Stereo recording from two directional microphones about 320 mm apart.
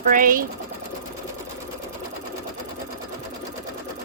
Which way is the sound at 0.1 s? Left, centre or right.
Right.